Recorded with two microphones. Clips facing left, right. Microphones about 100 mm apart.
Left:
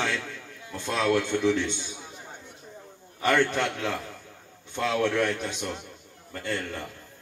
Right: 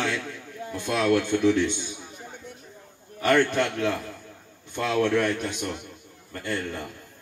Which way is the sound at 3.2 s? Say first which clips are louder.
Right 2 dB; 5° right (ahead or behind).